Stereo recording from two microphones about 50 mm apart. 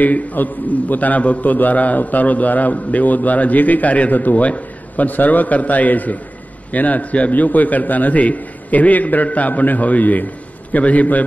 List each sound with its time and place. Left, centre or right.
0.0 s a man's voice: left